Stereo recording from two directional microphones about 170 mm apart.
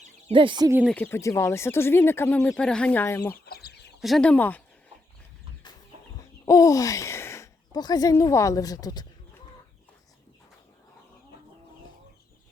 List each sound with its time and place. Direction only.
0.3 s speech: 30° right (ahead or behind)
0.9 s speech: 10° left (ahead or behind)
3.4 s chicken: 70° left (ahead or behind)
4.0 s speech: 5° left (ahead or behind)
6.4 s speech: 20° left (ahead or behind)